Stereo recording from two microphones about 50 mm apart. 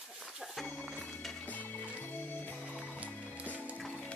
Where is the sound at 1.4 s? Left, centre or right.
Left.